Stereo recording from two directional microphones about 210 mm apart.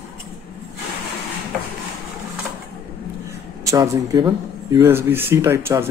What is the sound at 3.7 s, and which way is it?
Speech, 15° right (ahead or behind).